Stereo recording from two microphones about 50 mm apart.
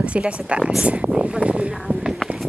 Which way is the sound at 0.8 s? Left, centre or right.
Right.